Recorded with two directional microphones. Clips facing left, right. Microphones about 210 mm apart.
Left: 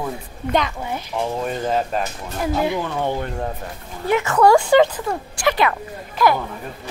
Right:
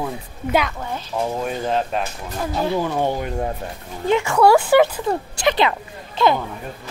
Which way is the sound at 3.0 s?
10° right (ahead or behind).